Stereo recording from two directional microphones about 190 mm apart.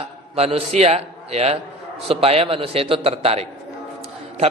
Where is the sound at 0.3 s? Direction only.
35° right (ahead or behind).